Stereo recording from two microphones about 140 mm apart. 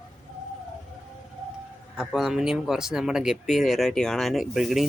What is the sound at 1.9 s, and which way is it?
A man's voice, 5° right (ahead or behind).